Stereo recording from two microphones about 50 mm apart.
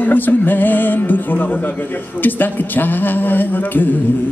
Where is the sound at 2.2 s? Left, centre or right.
Left.